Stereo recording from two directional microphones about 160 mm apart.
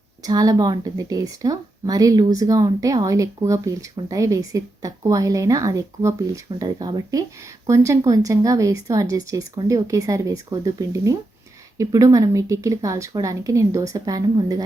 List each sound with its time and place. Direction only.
0.2 s speech: 25° right (ahead or behind)